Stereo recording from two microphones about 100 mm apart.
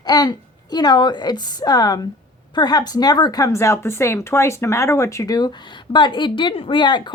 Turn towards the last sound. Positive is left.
turn(degrees=50)  # may be behind; listen again after turning